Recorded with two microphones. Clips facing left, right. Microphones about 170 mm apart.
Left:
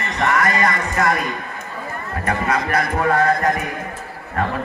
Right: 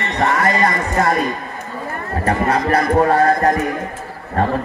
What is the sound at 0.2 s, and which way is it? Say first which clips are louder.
Speech: right 2 dB; 30° right (ahead or behind).